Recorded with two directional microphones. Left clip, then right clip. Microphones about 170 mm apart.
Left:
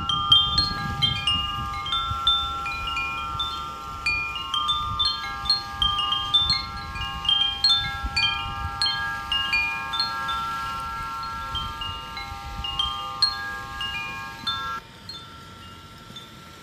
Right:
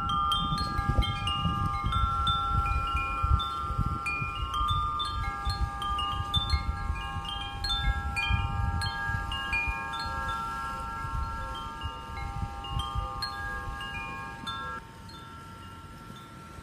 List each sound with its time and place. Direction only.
0.0 s wind chime: 50° right (ahead or behind)
1.9 s chime: 45° right (ahead or behind)
13.7 s wind chime: 35° right (ahead or behind)